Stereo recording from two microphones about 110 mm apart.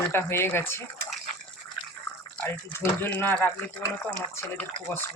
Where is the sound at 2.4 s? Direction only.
20° left (ahead or behind).